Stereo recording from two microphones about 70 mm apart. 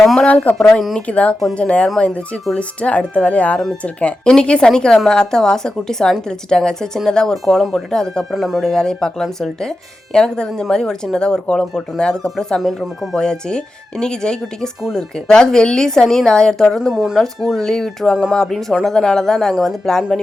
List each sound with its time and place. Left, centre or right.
0.0 s a sound: centre
0.6 s speech: centre
0.9 s speech: centre
8.4 s speech: centre
16.9 s speech: centre
17.2 s speech: centre